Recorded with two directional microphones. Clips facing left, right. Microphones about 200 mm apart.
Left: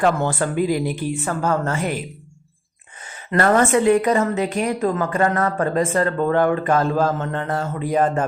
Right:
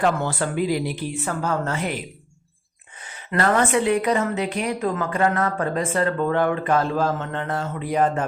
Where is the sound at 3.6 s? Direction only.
45° left (ahead or behind).